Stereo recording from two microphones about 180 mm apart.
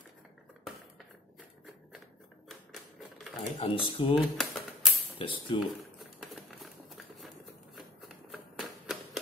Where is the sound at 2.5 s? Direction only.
Centre (ahead or behind).